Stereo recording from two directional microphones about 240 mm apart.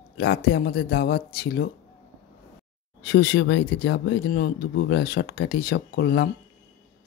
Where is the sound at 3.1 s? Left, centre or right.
Left.